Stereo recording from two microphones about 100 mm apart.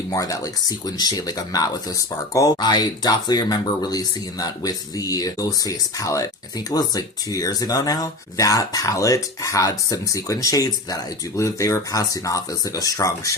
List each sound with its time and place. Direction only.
0.1 s speech: 35° left (ahead or behind)
2.6 s speech: 45° left (ahead or behind)